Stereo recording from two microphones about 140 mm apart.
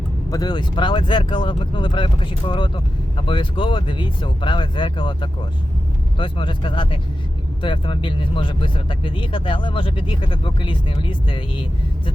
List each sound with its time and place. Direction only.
0.3 s speech: 30° left (ahead or behind)